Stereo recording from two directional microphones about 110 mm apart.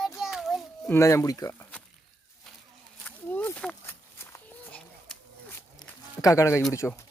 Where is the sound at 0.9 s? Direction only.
25° left (ahead or behind).